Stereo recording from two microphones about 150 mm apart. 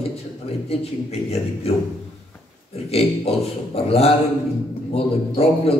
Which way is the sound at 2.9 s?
40° left (ahead or behind).